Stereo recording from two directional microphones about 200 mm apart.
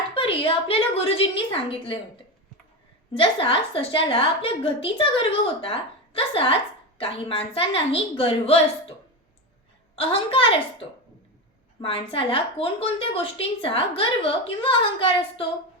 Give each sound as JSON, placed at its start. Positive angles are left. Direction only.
{"t": 0.1, "sound": "a woman's voice", "side_deg": 25}
{"t": 3.2, "sound": "a woman's voice", "side_deg": 25}
{"t": 9.9, "sound": "a woman's voice", "side_deg": 30}